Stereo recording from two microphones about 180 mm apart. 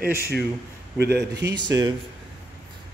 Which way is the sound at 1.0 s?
65° right (ahead or behind).